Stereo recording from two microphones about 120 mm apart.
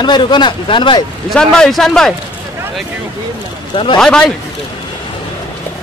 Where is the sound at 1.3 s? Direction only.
5° left (ahead or behind).